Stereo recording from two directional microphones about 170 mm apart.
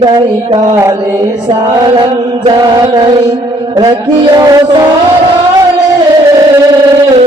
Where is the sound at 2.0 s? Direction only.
25° right (ahead or behind).